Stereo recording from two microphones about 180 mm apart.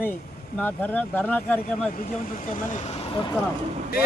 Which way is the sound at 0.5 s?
10° left (ahead or behind).